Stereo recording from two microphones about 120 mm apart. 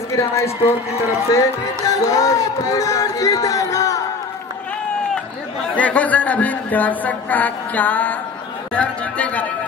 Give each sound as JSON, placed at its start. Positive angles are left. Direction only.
{"t": 0.1, "sound": "speech", "side_deg": 25}
{"t": 1.3, "sound": "music", "side_deg": 30}
{"t": 5.8, "sound": "speech", "side_deg": 10}